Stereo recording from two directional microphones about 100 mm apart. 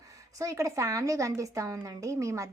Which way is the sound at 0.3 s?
30° right (ahead or behind).